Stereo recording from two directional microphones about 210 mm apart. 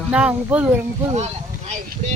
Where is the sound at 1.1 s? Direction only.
30° right (ahead or behind).